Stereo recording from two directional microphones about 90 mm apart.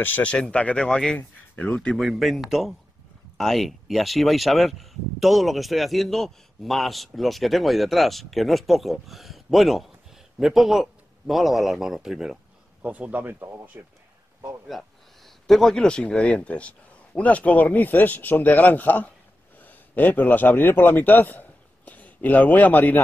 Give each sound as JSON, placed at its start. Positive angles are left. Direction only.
{"t": 0.0, "sound": "speech", "side_deg": 15}
{"t": 2.0, "sound": "speech", "side_deg": 0}
{"t": 12.8, "sound": "speech", "side_deg": -15}
{"t": 14.7, "sound": "a man's voice", "side_deg": 0}